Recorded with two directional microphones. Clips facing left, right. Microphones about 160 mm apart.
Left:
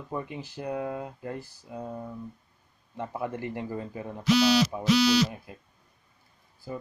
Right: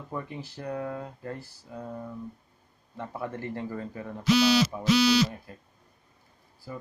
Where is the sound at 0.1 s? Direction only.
15° left (ahead or behind).